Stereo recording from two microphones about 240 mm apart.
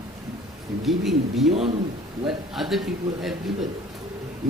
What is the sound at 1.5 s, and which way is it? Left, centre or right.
Speech, right.